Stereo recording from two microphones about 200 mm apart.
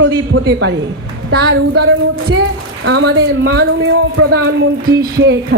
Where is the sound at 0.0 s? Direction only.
70° right (ahead or behind).